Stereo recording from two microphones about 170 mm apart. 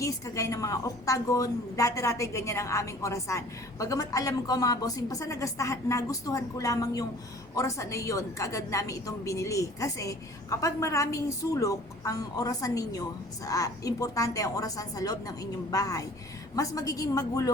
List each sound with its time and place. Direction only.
0.0 s a woman's voice: 20° left (ahead or behind)